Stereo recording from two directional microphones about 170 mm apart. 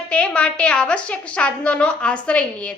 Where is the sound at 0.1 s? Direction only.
5° left (ahead or behind).